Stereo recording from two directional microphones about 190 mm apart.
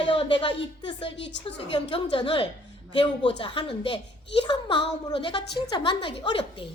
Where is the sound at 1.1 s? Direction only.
70° left (ahead or behind).